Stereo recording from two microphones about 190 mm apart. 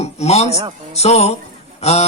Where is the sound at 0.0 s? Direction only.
35° left (ahead or behind).